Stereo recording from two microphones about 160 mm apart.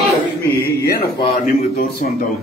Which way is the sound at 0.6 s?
70° left (ahead or behind).